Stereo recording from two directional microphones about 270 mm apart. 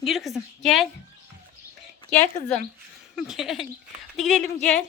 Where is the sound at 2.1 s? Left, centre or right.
Centre.